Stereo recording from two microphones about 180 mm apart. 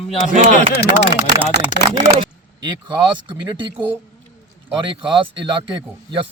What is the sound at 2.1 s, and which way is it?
Speech, 25° right (ahead or behind).